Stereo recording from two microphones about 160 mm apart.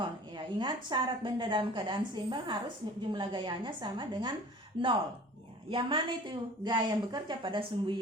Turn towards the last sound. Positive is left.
turn(degrees=-30)  # may be behind; listen again after turning